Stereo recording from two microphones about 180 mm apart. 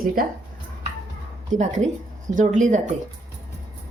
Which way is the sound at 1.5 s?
40° right (ahead or behind).